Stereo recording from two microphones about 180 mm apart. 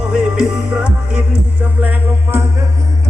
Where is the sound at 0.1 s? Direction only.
5° right (ahead or behind).